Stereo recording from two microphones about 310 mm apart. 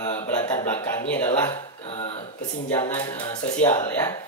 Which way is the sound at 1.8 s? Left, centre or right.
Centre.